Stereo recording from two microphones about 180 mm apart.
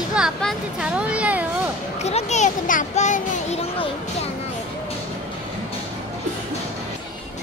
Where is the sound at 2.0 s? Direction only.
40° left (ahead or behind).